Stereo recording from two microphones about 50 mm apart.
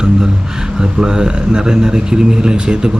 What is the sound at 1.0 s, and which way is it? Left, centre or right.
Speech, centre.